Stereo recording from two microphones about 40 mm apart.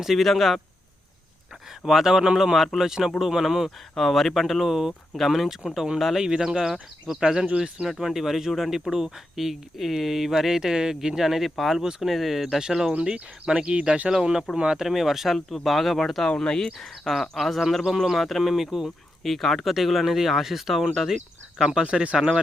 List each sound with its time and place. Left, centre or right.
0.0 s speech: centre
1.8 s speech: centre
3.9 s speech: centre
11.8 s speech: centre
12.0 s speech: centre
13.1 s speech: right
14.5 s speech: centre
14.9 s speech: centre
15.4 s speech: centre
16.7 s speech: centre
19.2 s speech: centre